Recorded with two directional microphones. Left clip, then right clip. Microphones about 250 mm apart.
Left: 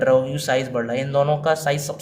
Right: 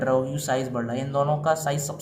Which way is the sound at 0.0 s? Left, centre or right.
Left.